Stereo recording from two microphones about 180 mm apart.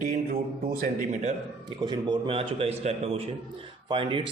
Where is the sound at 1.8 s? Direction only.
25° right (ahead or behind).